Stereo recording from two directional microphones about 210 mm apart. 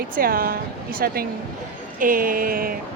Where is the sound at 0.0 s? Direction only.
45° right (ahead or behind).